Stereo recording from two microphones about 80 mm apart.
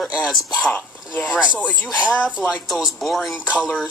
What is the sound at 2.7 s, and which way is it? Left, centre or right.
Speech, centre.